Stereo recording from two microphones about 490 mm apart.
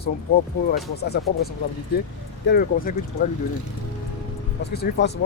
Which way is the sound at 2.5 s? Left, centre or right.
Centre.